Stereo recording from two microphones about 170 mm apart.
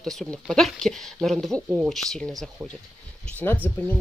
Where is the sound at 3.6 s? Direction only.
15° left (ahead or behind).